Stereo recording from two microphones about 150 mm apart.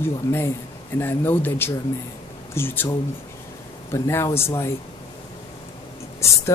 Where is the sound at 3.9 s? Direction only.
20° left (ahead or behind).